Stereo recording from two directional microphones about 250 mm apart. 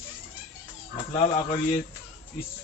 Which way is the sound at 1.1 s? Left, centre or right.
Left.